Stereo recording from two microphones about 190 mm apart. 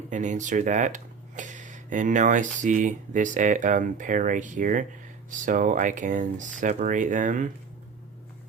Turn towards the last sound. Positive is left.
turn(degrees=-40)  # may be behind; listen again after turning